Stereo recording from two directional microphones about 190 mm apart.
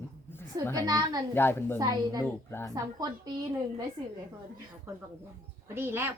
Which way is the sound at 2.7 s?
20° right (ahead or behind).